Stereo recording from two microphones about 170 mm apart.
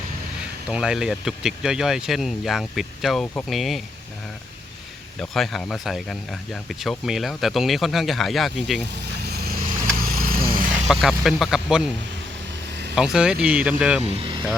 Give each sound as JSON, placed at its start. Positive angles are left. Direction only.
{"t": 0.7, "sound": "speech", "side_deg": -5}
{"t": 5.2, "sound": "speech", "side_deg": 0}
{"t": 10.0, "sound": "vehicle", "side_deg": -55}
{"t": 10.8, "sound": "speech", "side_deg": 0}
{"t": 13.0, "sound": "speech", "side_deg": -5}
{"t": 14.2, "sound": "vehicle", "side_deg": -30}